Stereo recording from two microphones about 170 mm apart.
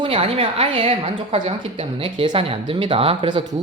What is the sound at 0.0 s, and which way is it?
A woman's voice, 30° right (ahead or behind).